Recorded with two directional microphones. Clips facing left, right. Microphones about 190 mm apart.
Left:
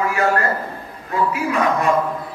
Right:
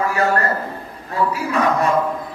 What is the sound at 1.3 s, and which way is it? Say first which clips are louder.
Speech: right 1 dB; 35° right (ahead or behind).